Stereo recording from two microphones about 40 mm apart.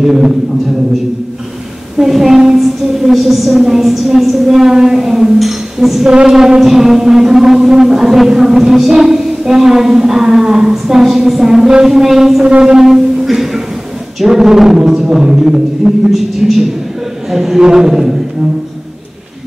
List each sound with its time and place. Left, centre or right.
0.0 s music: centre
2.0 s music: centre
12.4 s speech: right
12.7 s music: centre